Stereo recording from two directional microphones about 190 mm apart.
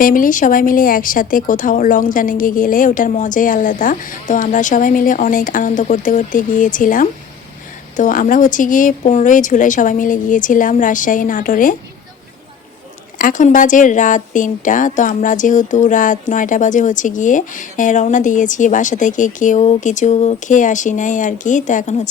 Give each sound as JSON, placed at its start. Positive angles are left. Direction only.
{"t": 0.0, "sound": "speech", "side_deg": 45}
{"t": 13.1, "sound": "a woman's voice", "side_deg": 45}